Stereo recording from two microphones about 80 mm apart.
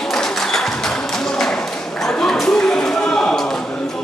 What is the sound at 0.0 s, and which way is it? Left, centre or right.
Music, centre.